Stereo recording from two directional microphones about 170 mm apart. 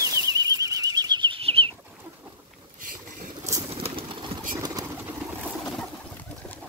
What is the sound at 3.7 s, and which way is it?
Pigeon, 35° right (ahead or behind).